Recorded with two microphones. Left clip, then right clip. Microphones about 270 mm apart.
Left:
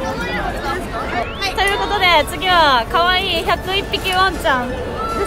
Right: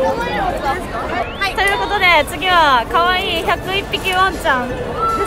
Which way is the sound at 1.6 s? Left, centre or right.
Centre.